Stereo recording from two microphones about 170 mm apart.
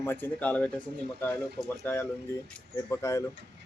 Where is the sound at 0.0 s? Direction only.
10° left (ahead or behind).